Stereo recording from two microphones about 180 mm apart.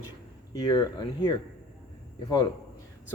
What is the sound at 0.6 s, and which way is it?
Speech, 25° left (ahead or behind).